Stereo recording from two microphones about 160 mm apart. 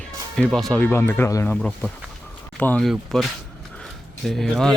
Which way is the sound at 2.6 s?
5° left (ahead or behind).